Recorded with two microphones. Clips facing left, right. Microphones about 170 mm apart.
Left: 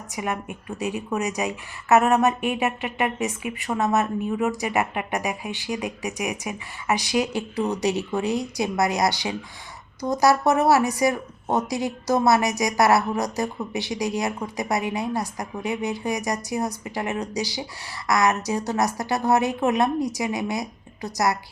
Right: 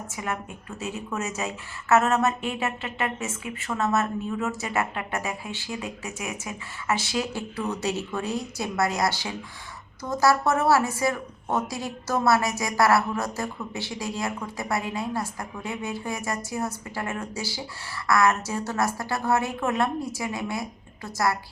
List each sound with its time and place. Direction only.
0.1 s a woman's voice: 15° left (ahead or behind)